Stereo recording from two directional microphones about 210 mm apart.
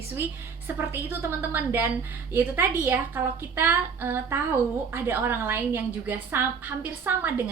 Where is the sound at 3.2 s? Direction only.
10° right (ahead or behind).